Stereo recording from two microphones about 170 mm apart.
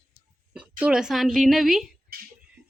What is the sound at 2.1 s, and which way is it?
Music, 60° right (ahead or behind).